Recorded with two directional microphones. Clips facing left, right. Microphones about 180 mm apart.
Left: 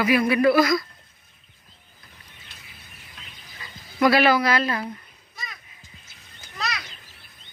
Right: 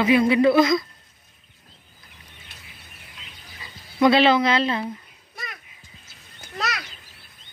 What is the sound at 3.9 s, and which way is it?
Speech, 20° right (ahead or behind).